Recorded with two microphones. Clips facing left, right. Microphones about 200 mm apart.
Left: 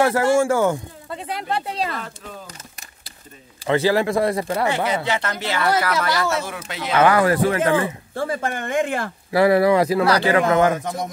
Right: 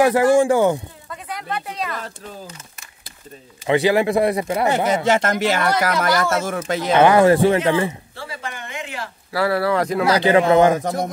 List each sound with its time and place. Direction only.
0.0 s speech: 15° right (ahead or behind)
1.1 s speech: 30° left (ahead or behind)
3.6 s speech: 15° right (ahead or behind)
4.6 s speech: 45° right (ahead or behind)
6.9 s speech: 25° right (ahead or behind)
7.6 s speech: 50° left (ahead or behind)
9.3 s speech: 20° left (ahead or behind)
10.0 s speech: 25° right (ahead or behind)